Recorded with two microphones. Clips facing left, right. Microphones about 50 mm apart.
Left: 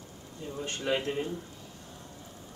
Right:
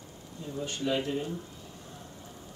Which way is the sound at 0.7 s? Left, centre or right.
Left.